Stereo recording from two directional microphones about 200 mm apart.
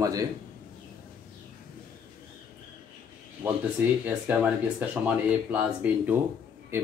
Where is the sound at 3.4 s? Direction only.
15° right (ahead or behind).